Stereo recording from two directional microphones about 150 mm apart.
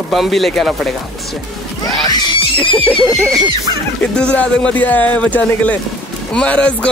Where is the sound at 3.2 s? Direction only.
20° right (ahead or behind).